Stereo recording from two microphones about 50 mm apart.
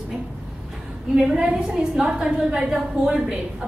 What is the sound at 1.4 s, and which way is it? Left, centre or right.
A woman's voice, centre.